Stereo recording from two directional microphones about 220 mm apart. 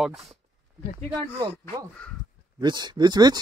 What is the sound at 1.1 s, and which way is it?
Speech, 15° right (ahead or behind).